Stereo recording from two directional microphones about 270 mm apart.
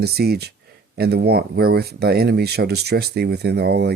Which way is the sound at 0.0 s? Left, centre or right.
Right.